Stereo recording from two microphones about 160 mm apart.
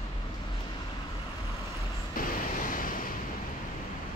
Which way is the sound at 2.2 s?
60° left (ahead or behind).